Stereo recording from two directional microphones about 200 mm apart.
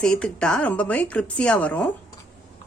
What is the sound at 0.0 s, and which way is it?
A woman's voice, 5° left (ahead or behind).